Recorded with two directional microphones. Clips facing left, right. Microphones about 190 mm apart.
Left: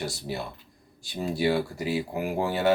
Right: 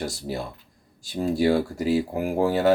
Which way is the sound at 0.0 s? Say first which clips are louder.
Right 3 dB; 40° right (ahead or behind).